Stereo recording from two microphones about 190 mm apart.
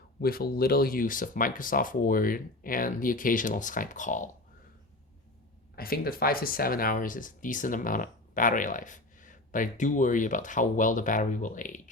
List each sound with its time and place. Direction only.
0.2 s speech: 50° left (ahead or behind)
5.7 s speech: 50° left (ahead or behind)